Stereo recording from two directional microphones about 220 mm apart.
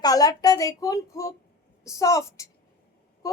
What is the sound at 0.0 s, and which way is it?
A woman's voice, 15° left (ahead or behind).